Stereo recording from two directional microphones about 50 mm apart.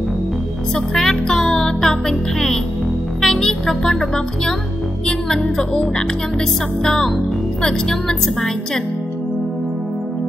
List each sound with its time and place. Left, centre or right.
0.7 s music: centre
3.2 s speech: centre
5.0 s music: centre